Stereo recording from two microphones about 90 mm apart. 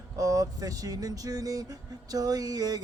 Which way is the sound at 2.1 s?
45° right (ahead or behind).